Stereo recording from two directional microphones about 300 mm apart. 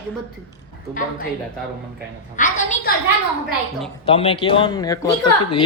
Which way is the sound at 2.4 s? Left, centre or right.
Left.